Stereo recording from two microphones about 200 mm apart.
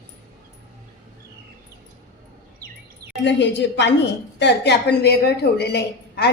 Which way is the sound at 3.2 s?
60° left (ahead or behind).